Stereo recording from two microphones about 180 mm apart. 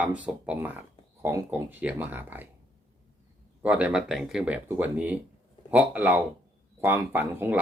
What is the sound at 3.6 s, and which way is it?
Speech, 5° right (ahead or behind).